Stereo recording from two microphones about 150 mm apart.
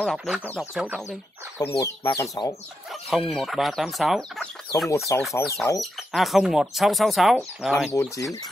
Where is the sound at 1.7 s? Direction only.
20° left (ahead or behind).